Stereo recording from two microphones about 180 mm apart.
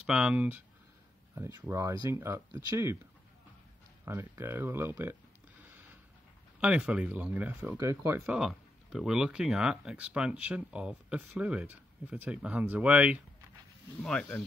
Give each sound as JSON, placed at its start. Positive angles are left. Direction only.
{"t": 0.0, "sound": "speech", "side_deg": -5}
{"t": 4.0, "sound": "speech", "side_deg": -15}
{"t": 6.6, "sound": "speech", "side_deg": -5}
{"t": 8.4, "sound": "speech", "side_deg": 0}
{"t": 14.0, "sound": "speech", "side_deg": 5}